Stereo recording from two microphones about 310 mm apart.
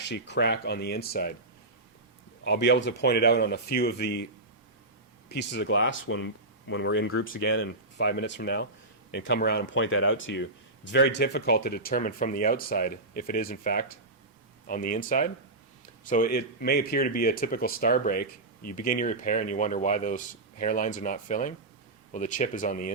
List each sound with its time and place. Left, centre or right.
0.0 s speech: left
2.4 s speech: left
5.3 s speech: left